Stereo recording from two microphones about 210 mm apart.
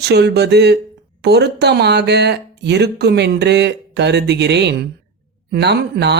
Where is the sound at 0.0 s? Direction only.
50° right (ahead or behind).